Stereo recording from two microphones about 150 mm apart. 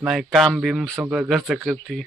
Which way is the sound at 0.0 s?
5° right (ahead or behind).